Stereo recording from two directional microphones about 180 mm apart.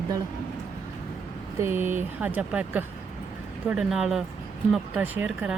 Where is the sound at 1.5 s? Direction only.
15° right (ahead or behind).